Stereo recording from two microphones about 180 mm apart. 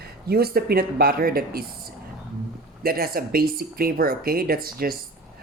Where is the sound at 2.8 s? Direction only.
55° right (ahead or behind).